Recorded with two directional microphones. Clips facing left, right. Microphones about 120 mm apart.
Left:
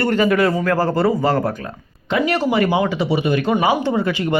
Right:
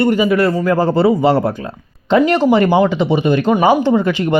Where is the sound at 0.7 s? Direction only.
20° right (ahead or behind).